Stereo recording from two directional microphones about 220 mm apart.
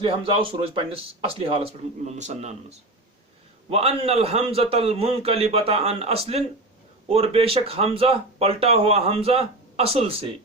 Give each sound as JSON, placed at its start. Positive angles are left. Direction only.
{"t": 0.0, "sound": "speech", "side_deg": -25}